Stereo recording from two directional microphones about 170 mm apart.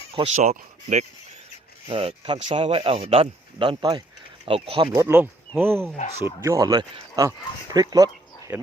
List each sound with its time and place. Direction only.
0.2 s speech: 40° right (ahead or behind)
1.9 s speech: 35° right (ahead or behind)
4.9 s speech: 15° right (ahead or behind)